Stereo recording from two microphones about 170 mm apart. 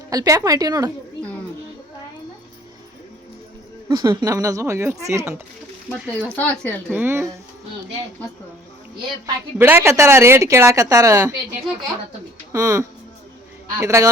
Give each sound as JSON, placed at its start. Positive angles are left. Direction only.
{"t": 0.1, "sound": "speech", "side_deg": -20}
{"t": 3.8, "sound": "speech", "side_deg": -20}
{"t": 6.3, "sound": "speech", "side_deg": 10}
{"t": 6.9, "sound": "a woman's voice", "side_deg": -10}
{"t": 9.2, "sound": "a woman's voice", "side_deg": -10}
{"t": 12.5, "sound": "a woman's voice", "side_deg": -20}